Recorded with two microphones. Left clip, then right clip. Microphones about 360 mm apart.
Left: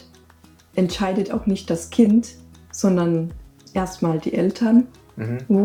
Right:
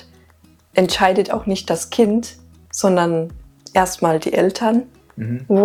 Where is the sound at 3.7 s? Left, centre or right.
Right.